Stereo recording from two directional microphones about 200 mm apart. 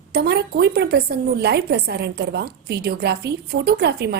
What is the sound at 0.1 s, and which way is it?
A woman's voice, 55° right (ahead or behind).